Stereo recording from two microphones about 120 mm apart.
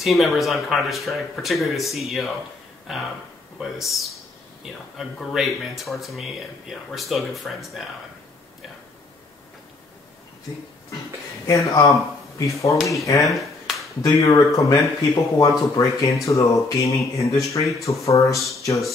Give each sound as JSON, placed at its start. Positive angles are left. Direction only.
{"t": 0.0, "sound": "speech", "side_deg": 0}
{"t": 3.5, "sound": "speech", "side_deg": 0}
{"t": 11.4, "sound": "speech", "side_deg": 25}
{"t": 12.7, "sound": "speech", "side_deg": 0}
{"t": 13.2, "sound": "finger snapping", "side_deg": 0}
{"t": 13.7, "sound": "speech", "side_deg": 25}